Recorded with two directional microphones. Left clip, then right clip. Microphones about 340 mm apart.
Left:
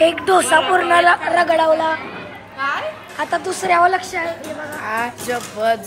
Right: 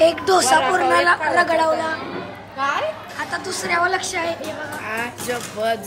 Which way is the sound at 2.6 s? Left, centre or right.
Right.